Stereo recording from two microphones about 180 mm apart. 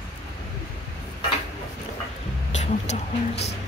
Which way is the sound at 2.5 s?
40° left (ahead or behind).